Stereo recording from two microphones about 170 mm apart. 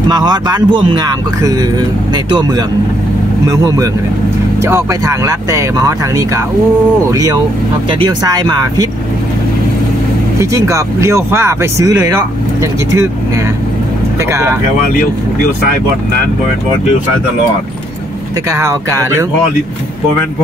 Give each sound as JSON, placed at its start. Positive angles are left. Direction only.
{"t": 0.1, "sound": "speech", "side_deg": -25}
{"t": 3.4, "sound": "speech", "side_deg": -20}
{"t": 10.4, "sound": "speech", "side_deg": -20}
{"t": 14.3, "sound": "speech", "side_deg": -15}
{"t": 18.5, "sound": "speech", "side_deg": -15}